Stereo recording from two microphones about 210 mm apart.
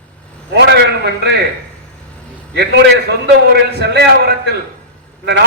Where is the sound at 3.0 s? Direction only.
50° right (ahead or behind).